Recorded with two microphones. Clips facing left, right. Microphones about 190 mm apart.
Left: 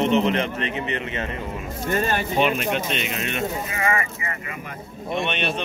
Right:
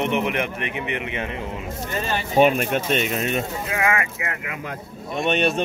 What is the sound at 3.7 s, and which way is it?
Speech, 75° right (ahead or behind).